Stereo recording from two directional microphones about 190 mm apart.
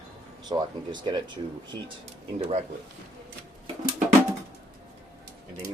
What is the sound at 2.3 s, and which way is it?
Speech, 35° right (ahead or behind).